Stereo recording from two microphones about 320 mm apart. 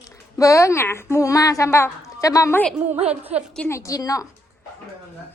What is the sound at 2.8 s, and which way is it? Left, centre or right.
Speech, centre.